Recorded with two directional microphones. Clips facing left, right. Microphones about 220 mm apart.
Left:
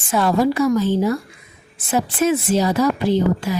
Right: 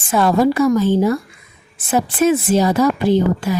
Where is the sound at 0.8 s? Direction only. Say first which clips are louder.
Right 3 dB; 55° right (ahead or behind).